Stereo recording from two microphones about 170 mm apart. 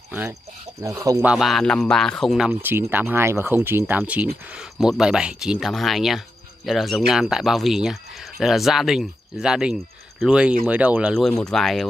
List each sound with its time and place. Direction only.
0.8 s speech: 20° right (ahead or behind)
1.2 s speech: 5° right (ahead or behind)
11.1 s speech: 5° left (ahead or behind)